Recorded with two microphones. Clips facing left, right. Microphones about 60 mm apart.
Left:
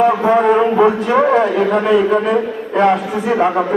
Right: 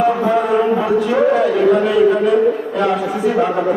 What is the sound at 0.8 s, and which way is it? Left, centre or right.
A man's voice, left.